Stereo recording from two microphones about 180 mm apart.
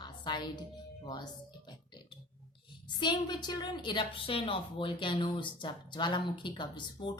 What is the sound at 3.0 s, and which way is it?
A woman's voice, 25° left (ahead or behind).